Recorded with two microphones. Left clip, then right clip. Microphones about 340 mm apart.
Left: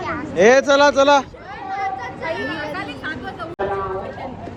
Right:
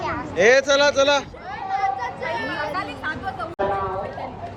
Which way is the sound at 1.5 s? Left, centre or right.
Right.